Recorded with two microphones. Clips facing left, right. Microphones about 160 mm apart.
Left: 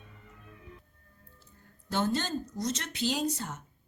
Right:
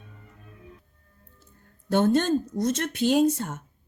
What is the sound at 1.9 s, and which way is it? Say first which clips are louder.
A woman's voice: right 9 dB; 55° right (ahead or behind).